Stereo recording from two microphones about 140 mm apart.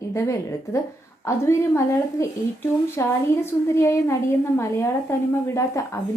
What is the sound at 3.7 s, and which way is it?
A woman's voice, 20° left (ahead or behind).